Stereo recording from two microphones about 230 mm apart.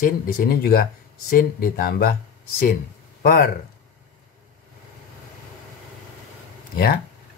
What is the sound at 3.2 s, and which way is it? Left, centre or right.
Speech, left.